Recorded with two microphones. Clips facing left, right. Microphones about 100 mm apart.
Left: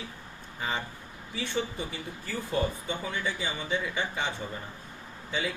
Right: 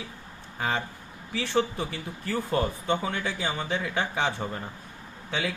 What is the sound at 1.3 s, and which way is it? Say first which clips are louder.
Speech: right 6 dB; 70° right (ahead or behind).